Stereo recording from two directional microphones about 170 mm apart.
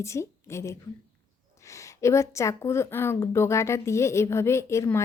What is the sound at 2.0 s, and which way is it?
A woman's voice, 15° left (ahead or behind).